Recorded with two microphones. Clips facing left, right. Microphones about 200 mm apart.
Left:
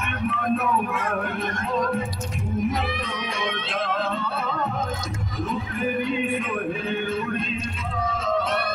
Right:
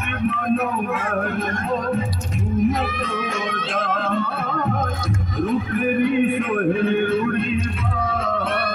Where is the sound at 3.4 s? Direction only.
45° right (ahead or behind).